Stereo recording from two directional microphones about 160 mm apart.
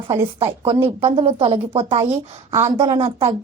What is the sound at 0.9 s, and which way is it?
Speech, 35° right (ahead or behind).